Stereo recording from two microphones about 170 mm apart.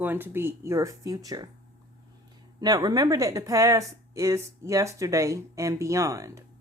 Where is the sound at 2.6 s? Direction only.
25° right (ahead or behind).